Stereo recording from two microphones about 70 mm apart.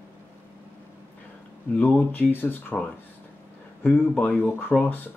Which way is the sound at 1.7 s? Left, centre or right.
Left.